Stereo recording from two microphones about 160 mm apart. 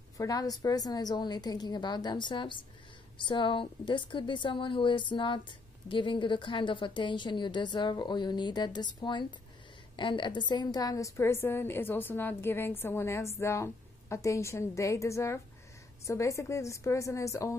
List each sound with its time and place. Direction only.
0.2 s a woman's voice: 25° left (ahead or behind)